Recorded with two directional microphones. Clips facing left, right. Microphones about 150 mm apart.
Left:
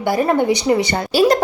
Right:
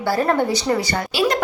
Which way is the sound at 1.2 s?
35° left (ahead or behind).